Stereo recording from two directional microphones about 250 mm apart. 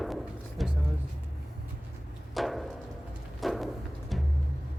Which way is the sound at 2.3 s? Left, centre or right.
Centre.